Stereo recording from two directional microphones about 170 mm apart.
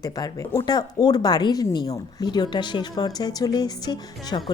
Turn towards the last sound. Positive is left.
turn(degrees=25)  # may be behind; listen again after turning